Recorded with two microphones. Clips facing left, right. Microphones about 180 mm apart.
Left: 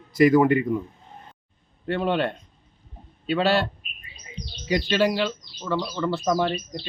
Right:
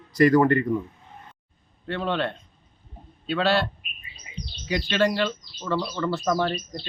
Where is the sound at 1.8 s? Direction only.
15° left (ahead or behind).